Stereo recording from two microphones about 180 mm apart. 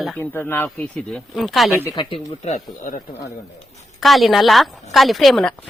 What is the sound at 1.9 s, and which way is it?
Speech, 25° left (ahead or behind).